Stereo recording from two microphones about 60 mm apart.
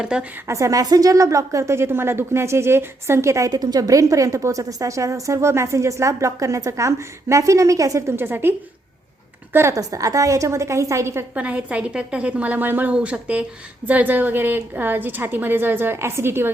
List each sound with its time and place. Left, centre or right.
0.0 s a woman's voice: centre
0.4 s a woman's voice: right
8.1 s a woman's voice: right
9.7 s a woman's voice: right
11.3 s a woman's voice: right
12.9 s a woman's voice: centre; by 16.5 s right